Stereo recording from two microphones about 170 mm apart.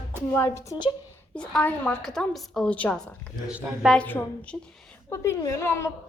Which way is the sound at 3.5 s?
5° right (ahead or behind).